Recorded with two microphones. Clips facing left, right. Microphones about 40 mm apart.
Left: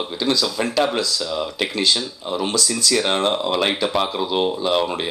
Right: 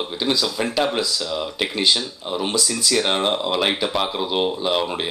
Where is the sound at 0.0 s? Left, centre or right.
Centre.